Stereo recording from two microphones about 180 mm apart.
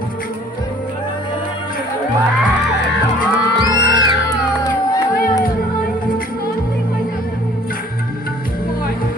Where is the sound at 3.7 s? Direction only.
25° right (ahead or behind).